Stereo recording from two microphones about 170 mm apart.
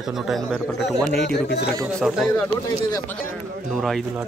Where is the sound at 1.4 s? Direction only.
85° left.